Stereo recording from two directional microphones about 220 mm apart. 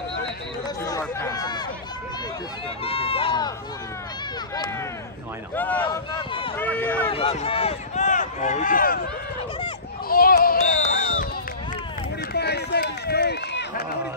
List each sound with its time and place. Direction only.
0.8 s a sound: 15° left (ahead or behind)
2.8 s speech: 25° left (ahead or behind)
5.6 s speech: 5° left (ahead or behind)
5.9 s speech: 20° left (ahead or behind)
6.6 s speech: 10° left (ahead or behind)
7.1 s speech: 25° left (ahead or behind); by 9.0 s 40° left (ahead or behind)
10.0 s a sound: 40° left (ahead or behind)
12.4 s run: 50° left (ahead or behind)